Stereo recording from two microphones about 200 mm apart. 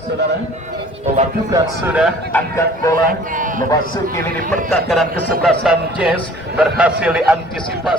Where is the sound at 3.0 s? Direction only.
40° right (ahead or behind).